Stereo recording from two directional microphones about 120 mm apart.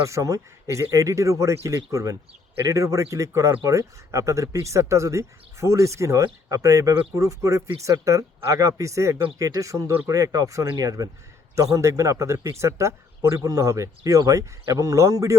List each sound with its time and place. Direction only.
0.0 s speech: 25° right (ahead or behind)